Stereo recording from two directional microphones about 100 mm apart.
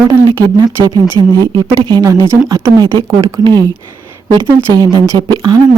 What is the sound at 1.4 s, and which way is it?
Speech, 45° right (ahead or behind).